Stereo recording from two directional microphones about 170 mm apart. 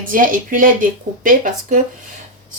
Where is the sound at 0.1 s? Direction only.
50° right (ahead or behind).